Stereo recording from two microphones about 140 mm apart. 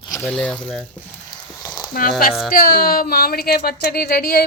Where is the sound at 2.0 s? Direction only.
90° left.